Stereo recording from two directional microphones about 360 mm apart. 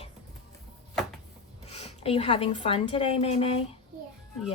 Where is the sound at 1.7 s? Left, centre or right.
Centre.